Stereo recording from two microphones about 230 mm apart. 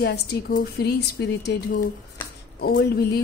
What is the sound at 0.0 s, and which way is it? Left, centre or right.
A woman's voice, left.